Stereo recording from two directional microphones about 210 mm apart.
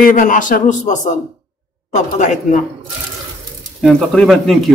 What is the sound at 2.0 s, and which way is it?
Speech, 35° left (ahead or behind).